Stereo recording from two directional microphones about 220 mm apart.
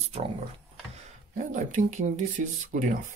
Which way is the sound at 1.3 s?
35° right (ahead or behind).